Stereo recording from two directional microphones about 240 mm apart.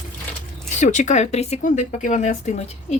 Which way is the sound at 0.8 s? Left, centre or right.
Left.